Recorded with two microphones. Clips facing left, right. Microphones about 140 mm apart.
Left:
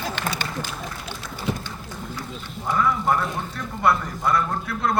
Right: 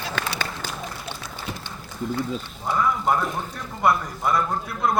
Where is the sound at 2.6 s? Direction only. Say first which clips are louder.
Left 1 dB; 20° right (ahead or behind).